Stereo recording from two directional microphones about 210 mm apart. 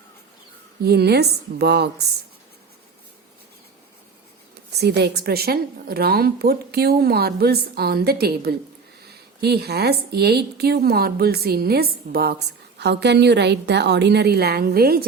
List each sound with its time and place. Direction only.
0.8 s a woman's voice: 50° right (ahead or behind)
4.8 s a woman's voice: 50° right (ahead or behind)